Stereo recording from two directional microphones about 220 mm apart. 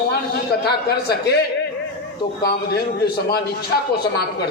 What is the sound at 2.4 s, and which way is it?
Speech, 45° left (ahead or behind).